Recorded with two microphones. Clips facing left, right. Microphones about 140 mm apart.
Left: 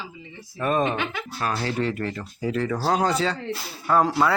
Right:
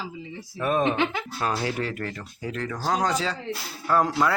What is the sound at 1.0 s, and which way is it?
Speech, 25° right (ahead or behind).